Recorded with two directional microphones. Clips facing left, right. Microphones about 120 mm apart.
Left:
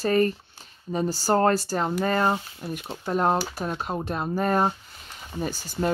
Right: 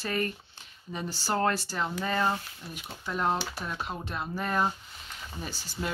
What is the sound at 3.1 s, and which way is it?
A woman's voice, 45° left (ahead or behind).